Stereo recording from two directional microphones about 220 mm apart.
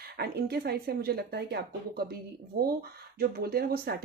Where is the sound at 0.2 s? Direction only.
45° right (ahead or behind).